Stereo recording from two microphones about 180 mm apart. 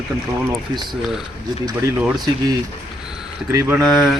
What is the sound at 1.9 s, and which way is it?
Speech, 10° right (ahead or behind).